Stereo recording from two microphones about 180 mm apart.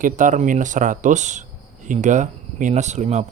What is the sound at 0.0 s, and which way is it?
Speech, 45° right (ahead or behind).